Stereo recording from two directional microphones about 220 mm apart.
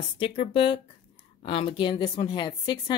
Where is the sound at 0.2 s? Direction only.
25° left (ahead or behind).